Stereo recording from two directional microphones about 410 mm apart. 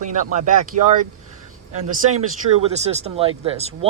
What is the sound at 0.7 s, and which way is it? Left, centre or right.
Speech, right.